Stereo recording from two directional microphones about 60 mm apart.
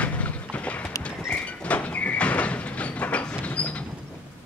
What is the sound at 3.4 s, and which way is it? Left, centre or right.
Sliding door, left.